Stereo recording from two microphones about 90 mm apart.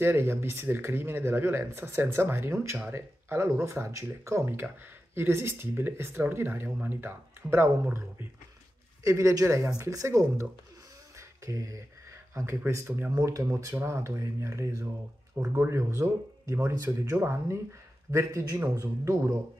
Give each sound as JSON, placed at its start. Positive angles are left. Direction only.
{"t": 0.0, "sound": "speech", "side_deg": -25}
{"t": 9.0, "sound": "a man's voice", "side_deg": -35}
{"t": 11.1, "sound": "a sound", "side_deg": -35}
{"t": 12.4, "sound": "speech", "side_deg": -30}
{"t": 13.1, "sound": "a man's voice", "side_deg": -40}
{"t": 16.7, "sound": "a man's voice", "side_deg": -40}
{"t": 17.1, "sound": "a man's voice", "side_deg": -30}